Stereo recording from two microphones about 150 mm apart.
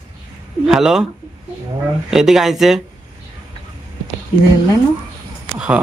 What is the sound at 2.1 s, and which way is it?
Speech, centre (ahead or behind).